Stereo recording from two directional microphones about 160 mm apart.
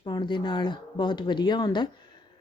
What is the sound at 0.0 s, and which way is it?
A woman's voice, 30° left (ahead or behind).